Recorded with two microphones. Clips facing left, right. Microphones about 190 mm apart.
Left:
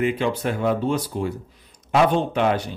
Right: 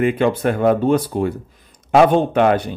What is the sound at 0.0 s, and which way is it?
Speech, 55° right (ahead or behind).